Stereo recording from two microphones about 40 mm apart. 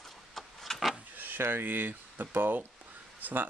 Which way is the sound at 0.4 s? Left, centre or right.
Centre.